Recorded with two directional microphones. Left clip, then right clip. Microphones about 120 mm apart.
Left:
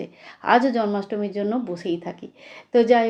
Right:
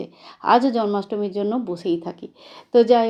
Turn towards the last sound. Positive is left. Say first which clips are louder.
# right 2 dB
turn(degrees=-45)  # may be behind; listen again after turning